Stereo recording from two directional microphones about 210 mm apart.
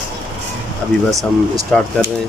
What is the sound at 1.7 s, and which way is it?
Speech, centre (ahead or behind).